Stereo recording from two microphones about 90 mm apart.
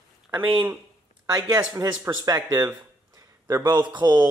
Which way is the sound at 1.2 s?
50° right (ahead or behind).